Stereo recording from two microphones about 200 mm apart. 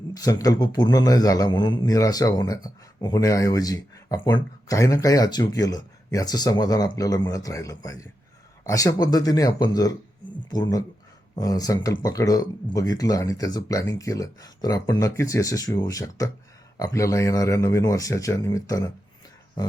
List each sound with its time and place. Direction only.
0.1 s speech: 20° left (ahead or behind)